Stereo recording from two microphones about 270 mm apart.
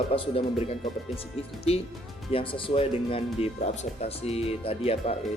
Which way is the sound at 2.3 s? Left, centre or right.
Centre.